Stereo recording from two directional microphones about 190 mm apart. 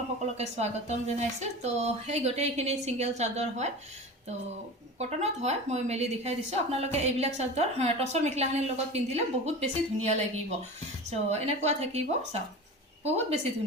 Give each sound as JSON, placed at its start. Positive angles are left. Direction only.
{"t": 0.3, "sound": "a woman's voice", "side_deg": -35}
{"t": 4.9, "sound": "a woman's voice", "side_deg": -35}
{"t": 13.1, "sound": "a woman's voice", "side_deg": -35}